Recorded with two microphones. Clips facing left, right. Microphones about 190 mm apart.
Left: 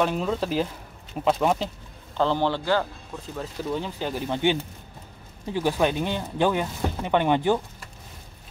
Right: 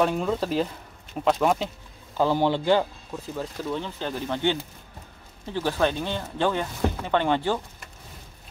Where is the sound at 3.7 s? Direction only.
10° left (ahead or behind).